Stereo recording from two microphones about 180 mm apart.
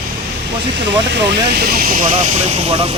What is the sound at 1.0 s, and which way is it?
Speech, 75° right (ahead or behind).